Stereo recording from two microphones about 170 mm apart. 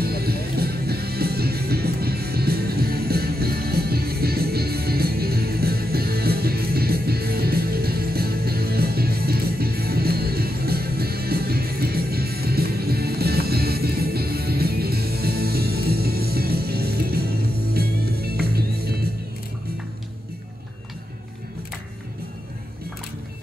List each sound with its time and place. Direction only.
0.0 s music: 65° right (ahead or behind)